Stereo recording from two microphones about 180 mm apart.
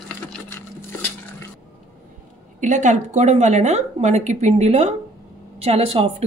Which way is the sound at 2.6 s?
45° right (ahead or behind).